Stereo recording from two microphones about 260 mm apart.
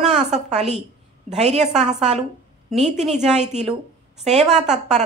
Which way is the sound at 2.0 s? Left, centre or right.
Right.